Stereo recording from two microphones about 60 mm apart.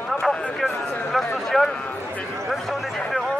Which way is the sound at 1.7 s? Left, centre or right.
Centre.